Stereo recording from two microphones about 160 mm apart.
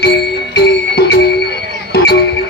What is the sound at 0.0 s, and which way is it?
Music, 90° left.